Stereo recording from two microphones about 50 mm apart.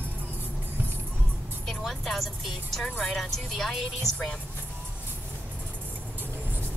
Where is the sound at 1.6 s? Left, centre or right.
Centre.